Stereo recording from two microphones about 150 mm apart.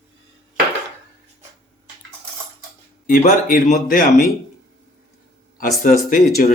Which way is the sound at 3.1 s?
60° left (ahead or behind).